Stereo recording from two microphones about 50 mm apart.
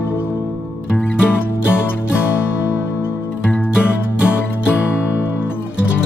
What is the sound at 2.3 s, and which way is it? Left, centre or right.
Music, left.